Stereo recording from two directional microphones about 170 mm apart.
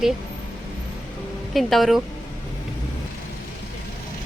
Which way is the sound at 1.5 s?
Centre (ahead or behind).